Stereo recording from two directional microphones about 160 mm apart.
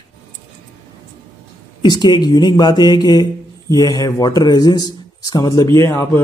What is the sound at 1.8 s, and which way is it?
A man's voice, 25° left (ahead or behind).